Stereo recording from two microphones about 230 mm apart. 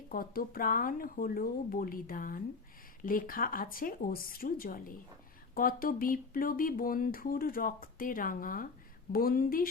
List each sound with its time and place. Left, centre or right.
0.1 s speech: left